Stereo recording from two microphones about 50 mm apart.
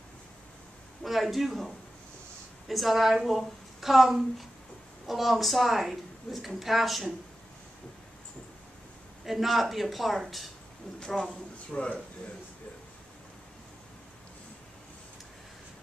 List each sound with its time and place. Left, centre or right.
1.0 s a woman's voice: centre
2.7 s a woman's voice: centre
9.2 s a woman's voice: centre
11.0 s speech: centre